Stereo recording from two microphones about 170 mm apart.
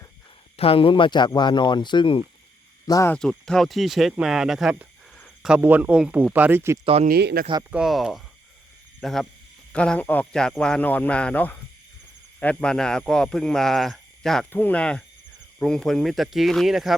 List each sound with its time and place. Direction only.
0.5 s speech: 35° left (ahead or behind)
2.8 s speech: 20° left (ahead or behind)
3.2 s speech: 5° left (ahead or behind); by 6.7 s 15° right (ahead or behind)
6.8 s speech: 35° right (ahead or behind)
7.1 s speech: 70° right (ahead or behind)
7.7 s speech: 5° right (ahead or behind)